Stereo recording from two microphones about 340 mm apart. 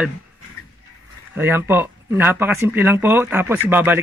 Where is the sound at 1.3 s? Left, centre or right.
Centre.